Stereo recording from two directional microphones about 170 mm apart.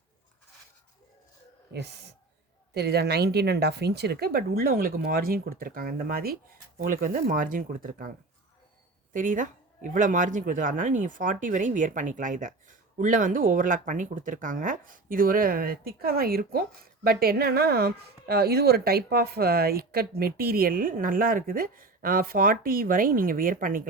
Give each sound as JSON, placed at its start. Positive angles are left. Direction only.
{"t": 1.7, "sound": "speech", "side_deg": -75}
{"t": 9.1, "sound": "speech", "side_deg": -50}